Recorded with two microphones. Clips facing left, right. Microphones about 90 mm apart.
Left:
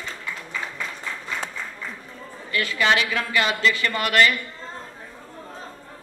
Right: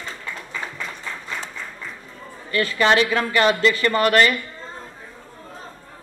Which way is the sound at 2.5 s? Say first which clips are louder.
Right 3 dB; 35° right (ahead or behind).